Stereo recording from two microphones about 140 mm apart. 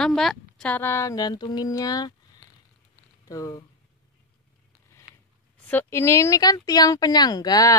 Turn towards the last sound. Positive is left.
turn(degrees=25)  # may be behind; listen again after turning